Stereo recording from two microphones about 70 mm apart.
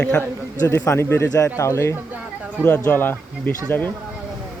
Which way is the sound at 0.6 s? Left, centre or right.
Left.